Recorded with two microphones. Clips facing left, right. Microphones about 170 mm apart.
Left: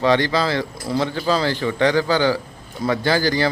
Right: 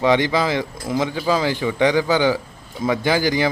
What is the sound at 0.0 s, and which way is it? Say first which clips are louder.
Speech: even; 15° right (ahead or behind).